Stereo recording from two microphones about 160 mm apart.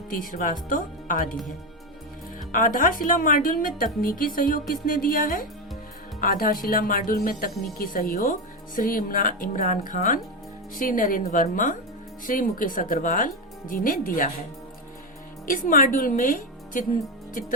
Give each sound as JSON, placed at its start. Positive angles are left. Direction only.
{"t": 0.2, "sound": "speech", "side_deg": 55}
{"t": 2.5, "sound": "speech", "side_deg": 55}
{"t": 15.4, "sound": "speech", "side_deg": 60}